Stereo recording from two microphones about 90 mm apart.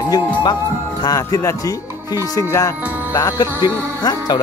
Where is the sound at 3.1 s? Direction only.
35° left (ahead or behind).